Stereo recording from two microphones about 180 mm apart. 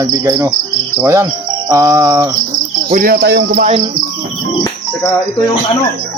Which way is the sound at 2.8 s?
50° right (ahead or behind).